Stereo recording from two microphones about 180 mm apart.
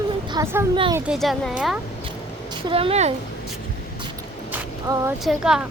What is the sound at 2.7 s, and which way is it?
Speech, 35° right (ahead or behind).